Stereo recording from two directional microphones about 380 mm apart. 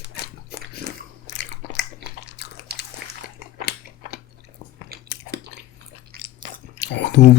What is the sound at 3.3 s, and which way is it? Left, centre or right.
Chewing, left.